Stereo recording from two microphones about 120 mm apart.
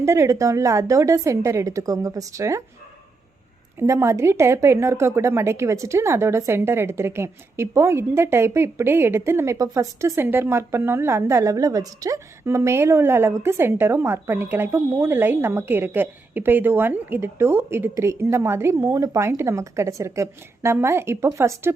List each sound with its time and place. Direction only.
0.0 s a woman's voice: 25° right (ahead or behind)
3.8 s a woman's voice: 25° right (ahead or behind)